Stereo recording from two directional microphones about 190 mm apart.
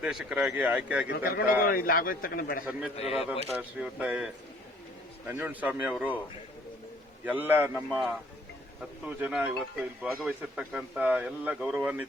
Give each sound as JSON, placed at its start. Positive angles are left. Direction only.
{"t": 0.0, "sound": "speech", "side_deg": -5}
{"t": 1.2, "sound": "a man's voice", "side_deg": 55}
{"t": 2.9, "sound": "speech", "side_deg": 30}
{"t": 3.5, "sound": "speech", "side_deg": -5}
{"t": 7.3, "sound": "speech", "side_deg": -10}